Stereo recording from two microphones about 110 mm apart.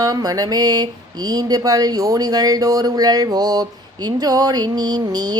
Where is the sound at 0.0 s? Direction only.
35° right (ahead or behind).